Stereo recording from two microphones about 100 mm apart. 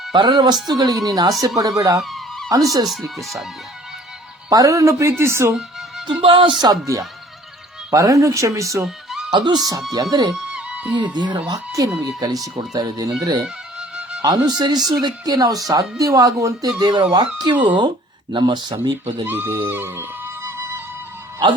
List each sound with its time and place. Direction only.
0.1 s speech: 50° right (ahead or behind)
2.0 s a sound: centre (ahead or behind)
2.5 s speech: 35° right (ahead or behind)
3.2 s speech: centre (ahead or behind)
4.4 s speech: 35° right (ahead or behind)
6.2 s speech: 60° right (ahead or behind)
7.9 s speech: 35° right (ahead or behind)
9.3 s speech: 45° right (ahead or behind)
10.3 s music: 10° right (ahead or behind)
11.1 s speech: 45° right (ahead or behind)
13.7 s music: 10° right (ahead or behind)
14.2 s speech: 40° right (ahead or behind)
19.2 s music: 20° right (ahead or behind)